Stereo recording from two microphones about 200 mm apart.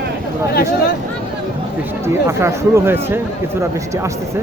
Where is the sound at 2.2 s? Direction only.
15° right (ahead or behind).